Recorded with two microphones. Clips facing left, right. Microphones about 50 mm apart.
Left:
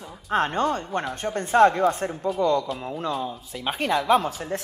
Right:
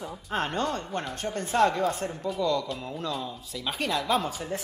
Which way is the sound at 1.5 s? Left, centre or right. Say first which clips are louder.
Left 6 dB; left.